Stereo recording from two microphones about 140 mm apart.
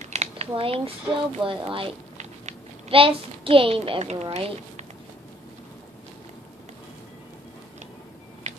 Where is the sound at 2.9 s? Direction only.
40° right (ahead or behind).